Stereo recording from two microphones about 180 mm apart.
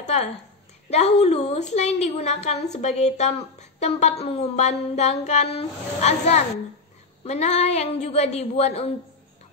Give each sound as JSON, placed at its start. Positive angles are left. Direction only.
{"t": 0.0, "sound": "a woman's voice", "side_deg": 40}